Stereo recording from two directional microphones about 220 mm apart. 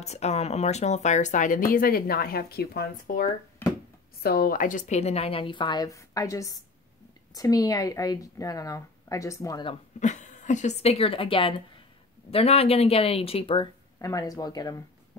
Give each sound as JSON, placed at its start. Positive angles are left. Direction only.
{"t": 0.0, "sound": "a woman's voice", "side_deg": 30}
{"t": 9.9, "sound": "speech", "side_deg": 35}